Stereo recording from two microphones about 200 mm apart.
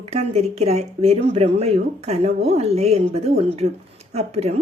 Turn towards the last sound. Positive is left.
turn(degrees=-30)  # may be behind; listen again after turning